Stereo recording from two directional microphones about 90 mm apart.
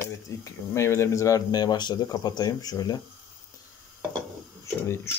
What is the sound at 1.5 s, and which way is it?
Speech, 50° left (ahead or behind).